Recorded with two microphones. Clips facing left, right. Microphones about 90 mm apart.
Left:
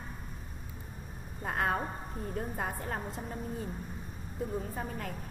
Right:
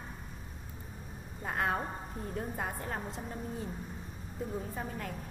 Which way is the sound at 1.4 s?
45° left (ahead or behind).